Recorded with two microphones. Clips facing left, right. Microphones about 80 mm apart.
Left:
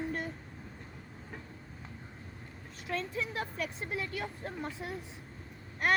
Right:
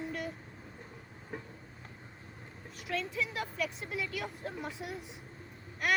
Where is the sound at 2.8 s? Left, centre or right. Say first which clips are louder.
Even; left.